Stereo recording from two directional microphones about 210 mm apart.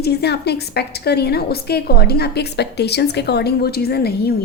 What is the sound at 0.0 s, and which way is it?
A woman's voice, 50° left (ahead or behind).